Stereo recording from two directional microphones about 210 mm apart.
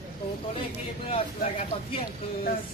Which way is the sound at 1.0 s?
30° left (ahead or behind).